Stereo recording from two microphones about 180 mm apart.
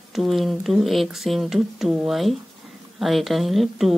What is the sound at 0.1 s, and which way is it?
Speech, centre (ahead or behind).